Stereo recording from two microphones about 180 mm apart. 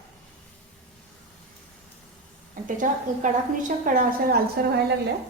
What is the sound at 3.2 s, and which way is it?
A woman's voice, 45° right (ahead or behind).